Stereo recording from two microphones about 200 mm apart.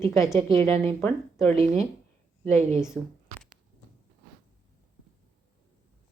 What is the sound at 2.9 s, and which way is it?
Speech, centre (ahead or behind).